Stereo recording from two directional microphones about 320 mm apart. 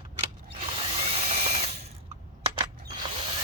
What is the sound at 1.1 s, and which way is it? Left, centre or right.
Ratchet, centre.